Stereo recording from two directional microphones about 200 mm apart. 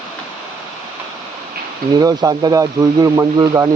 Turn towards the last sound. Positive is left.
turn(degrees=-15)  # may be behind; listen again after turning